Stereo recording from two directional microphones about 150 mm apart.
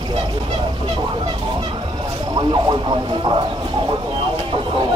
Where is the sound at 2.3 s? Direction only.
30° right (ahead or behind).